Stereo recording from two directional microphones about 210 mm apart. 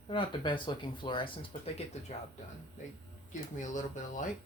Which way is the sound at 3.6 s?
35° left (ahead or behind).